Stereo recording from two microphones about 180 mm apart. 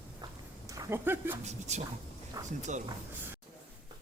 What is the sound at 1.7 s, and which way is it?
Speech, 40° right (ahead or behind).